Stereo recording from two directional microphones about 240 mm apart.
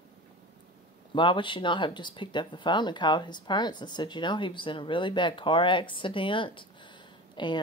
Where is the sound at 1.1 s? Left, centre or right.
Left.